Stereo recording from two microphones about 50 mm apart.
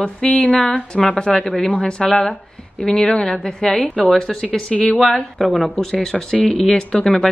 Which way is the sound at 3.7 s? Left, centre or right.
Centre.